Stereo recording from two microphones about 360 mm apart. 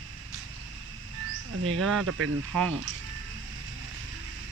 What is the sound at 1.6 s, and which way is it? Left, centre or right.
Speech, right.